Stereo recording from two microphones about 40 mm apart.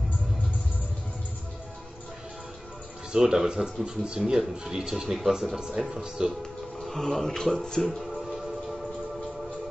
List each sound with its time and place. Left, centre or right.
3.1 s speech: centre
4.2 s speech: centre
6.8 s music: centre